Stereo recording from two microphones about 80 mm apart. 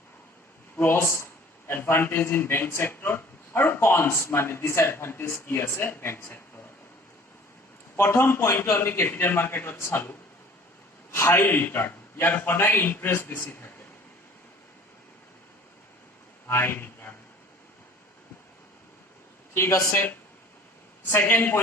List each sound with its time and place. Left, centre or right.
0.8 s a man's voice: left
7.9 s a man's voice: left
16.5 s a sound: left
19.5 s a man's voice: left